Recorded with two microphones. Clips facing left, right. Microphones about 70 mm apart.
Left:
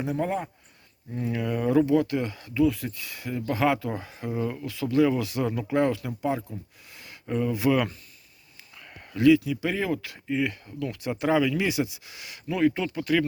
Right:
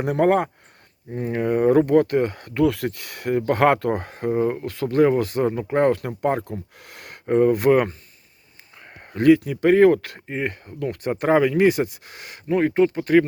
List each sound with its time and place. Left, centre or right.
0.0 s speech: right
1.1 s speech: right